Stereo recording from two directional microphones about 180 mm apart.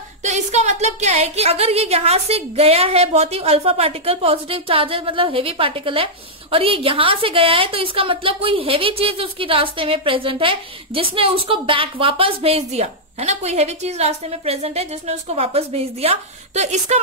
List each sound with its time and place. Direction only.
0.2 s a woman's voice: 40° right (ahead or behind)